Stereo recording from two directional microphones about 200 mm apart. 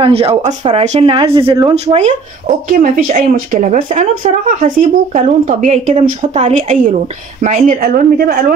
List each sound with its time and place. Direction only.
0.0 s a woman's voice: 30° right (ahead or behind); by 8.5 s 45° right (ahead or behind)